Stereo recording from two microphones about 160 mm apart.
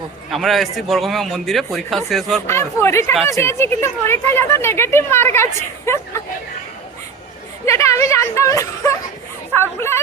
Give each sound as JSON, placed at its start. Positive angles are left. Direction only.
{"t": 0.3, "sound": "a man's voice", "side_deg": 0}
{"t": 2.5, "sound": "speech", "side_deg": 15}
{"t": 7.6, "sound": "speech", "side_deg": 20}